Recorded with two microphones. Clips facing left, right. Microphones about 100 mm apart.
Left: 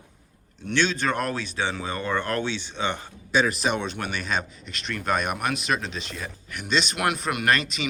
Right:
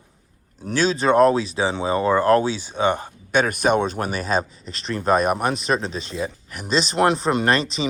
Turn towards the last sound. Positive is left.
turn(degrees=-30)  # may be behind; listen again after turning